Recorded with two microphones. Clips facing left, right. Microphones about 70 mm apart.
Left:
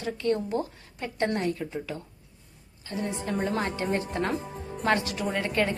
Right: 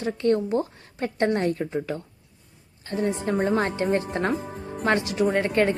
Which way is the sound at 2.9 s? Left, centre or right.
Right.